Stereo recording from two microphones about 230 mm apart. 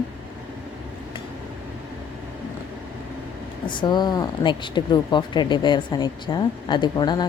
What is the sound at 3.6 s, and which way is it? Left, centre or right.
Speech, centre.